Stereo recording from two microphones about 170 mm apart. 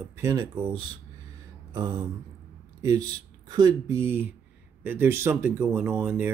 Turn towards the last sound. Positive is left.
turn(degrees=-10)  # may be behind; listen again after turning